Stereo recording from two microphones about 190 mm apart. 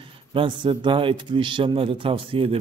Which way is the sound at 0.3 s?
30° right (ahead or behind).